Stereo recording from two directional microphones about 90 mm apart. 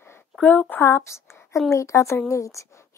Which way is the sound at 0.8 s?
30° left (ahead or behind).